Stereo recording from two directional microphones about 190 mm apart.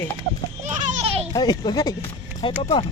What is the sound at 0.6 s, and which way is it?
Children playing, 35° right (ahead or behind).